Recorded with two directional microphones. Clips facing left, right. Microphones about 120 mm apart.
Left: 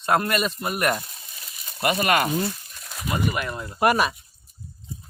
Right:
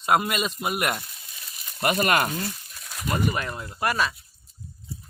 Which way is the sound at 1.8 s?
45° right (ahead or behind).